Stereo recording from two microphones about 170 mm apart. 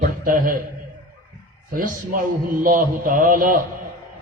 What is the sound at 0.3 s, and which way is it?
Speech, 55° right (ahead or behind).